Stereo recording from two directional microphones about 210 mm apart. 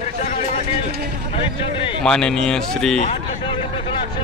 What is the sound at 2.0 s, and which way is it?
Speech, 5° left (ahead or behind).